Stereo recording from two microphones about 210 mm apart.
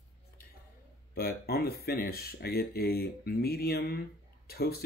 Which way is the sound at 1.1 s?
50° left (ahead or behind).